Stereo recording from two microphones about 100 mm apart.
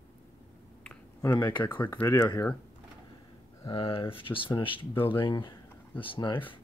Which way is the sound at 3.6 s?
65° left (ahead or behind).